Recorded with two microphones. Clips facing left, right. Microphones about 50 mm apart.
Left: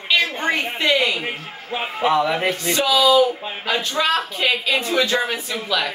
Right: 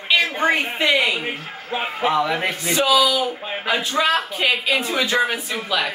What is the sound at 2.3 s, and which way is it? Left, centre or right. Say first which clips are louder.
Speech: left 1 dB; centre.